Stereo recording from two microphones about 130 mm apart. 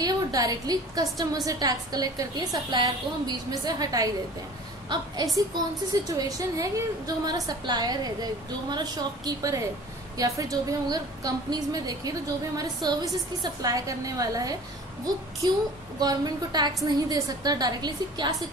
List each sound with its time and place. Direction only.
0.0 s a woman's voice: 30° right (ahead or behind)
16.0 s a woman's voice: 30° right (ahead or behind)